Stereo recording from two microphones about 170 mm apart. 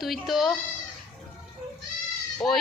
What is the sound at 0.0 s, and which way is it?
Speech, centre (ahead or behind).